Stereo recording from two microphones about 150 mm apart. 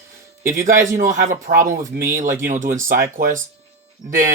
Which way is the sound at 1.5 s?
55° right (ahead or behind).